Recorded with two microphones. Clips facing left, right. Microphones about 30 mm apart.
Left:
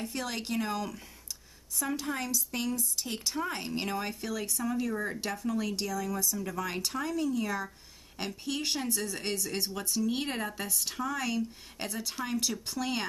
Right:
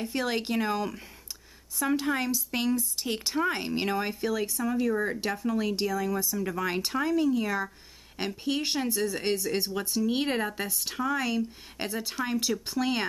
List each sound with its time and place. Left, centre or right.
0.1 s a woman's voice: right